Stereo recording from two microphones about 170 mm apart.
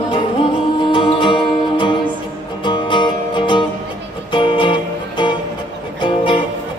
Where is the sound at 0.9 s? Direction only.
30° left (ahead or behind).